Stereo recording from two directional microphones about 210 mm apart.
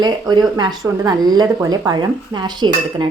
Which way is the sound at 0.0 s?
20° right (ahead or behind).